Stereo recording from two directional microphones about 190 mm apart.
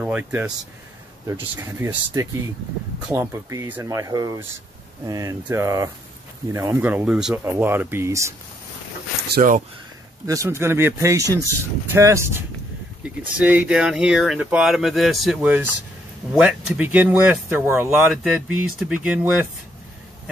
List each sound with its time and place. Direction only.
0.0 s speech: 10° right (ahead or behind)
9.3 s speech: 45° right (ahead or behind)
10.2 s speech: 15° right (ahead or behind)